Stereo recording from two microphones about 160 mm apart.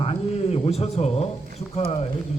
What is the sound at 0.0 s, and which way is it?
A man's voice, 40° left (ahead or behind).